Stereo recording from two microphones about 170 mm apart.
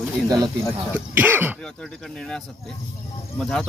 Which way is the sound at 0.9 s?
10° right (ahead or behind).